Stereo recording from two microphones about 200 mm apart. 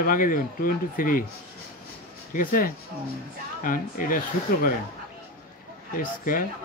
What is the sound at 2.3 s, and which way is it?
Speech, 45° left (ahead or behind).